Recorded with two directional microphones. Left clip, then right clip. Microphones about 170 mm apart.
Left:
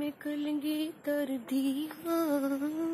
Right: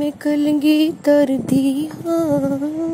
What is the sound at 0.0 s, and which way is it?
Music, 30° right (ahead or behind).